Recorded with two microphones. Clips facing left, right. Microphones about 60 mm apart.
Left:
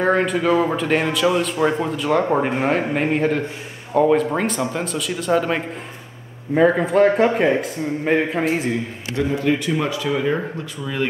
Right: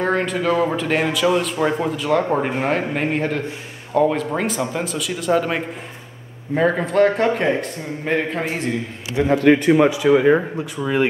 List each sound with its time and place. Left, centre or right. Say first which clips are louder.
0.0 s a man's voice: left 2 dB; centre
9.2 s a man's voice: right 5 dB; centre